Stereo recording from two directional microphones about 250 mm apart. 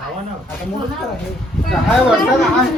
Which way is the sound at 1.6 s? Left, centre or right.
Centre.